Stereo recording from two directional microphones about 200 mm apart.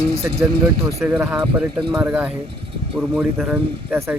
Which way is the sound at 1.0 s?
10° right (ahead or behind).